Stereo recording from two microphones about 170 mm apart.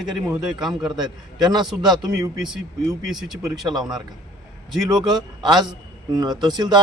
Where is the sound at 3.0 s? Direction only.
Centre (ahead or behind).